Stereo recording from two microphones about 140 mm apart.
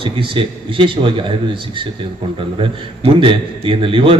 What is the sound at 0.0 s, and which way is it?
A man's voice, 40° right (ahead or behind).